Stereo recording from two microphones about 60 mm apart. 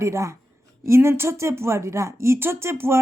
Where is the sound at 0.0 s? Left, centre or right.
Right.